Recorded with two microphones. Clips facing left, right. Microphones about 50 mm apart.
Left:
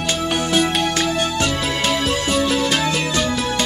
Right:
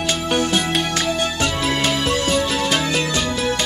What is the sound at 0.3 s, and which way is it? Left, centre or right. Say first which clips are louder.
Music: left 1 dB; centre.